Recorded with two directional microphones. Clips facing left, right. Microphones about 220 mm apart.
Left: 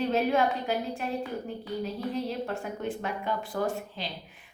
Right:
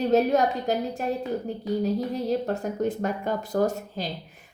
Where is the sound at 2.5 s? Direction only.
40° right (ahead or behind).